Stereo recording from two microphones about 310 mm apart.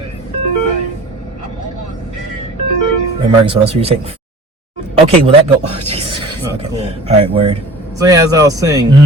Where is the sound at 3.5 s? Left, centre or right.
Centre.